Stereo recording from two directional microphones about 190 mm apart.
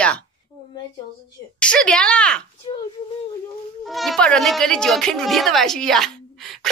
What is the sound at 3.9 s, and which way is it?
Speech, centre (ahead or behind).